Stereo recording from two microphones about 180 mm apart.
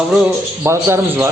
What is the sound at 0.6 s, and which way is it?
Speech, 15° right (ahead or behind).